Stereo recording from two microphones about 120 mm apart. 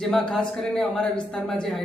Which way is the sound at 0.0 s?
5° left (ahead or behind).